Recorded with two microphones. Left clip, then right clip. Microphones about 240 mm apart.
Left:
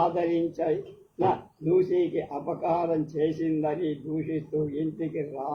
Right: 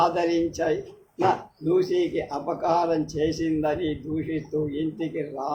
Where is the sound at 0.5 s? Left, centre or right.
Right.